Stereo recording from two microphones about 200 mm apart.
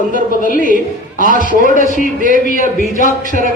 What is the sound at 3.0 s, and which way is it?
Speech, 40° right (ahead or behind).